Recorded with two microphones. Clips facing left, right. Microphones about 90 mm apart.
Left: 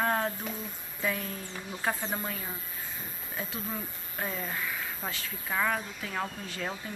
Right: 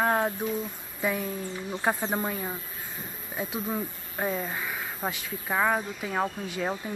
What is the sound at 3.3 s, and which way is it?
Speech, 20° right (ahead or behind).